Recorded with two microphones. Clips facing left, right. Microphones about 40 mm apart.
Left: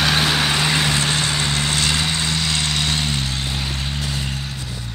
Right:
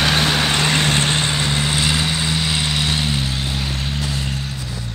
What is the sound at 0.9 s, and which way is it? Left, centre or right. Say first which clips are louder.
Vehicle: right 2 dB; centre.